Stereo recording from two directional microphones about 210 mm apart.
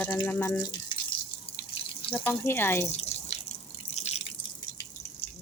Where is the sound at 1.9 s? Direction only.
25° left (ahead or behind).